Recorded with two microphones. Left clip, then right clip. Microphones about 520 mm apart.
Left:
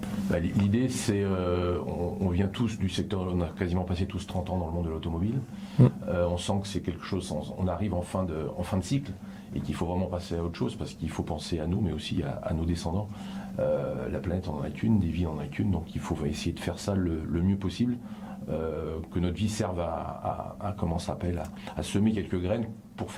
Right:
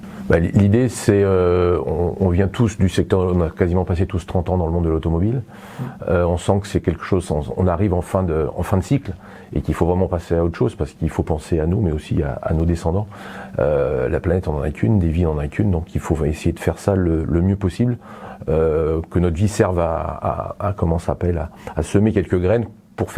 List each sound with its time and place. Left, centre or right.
0.3 s speech: right
6.1 s speech: right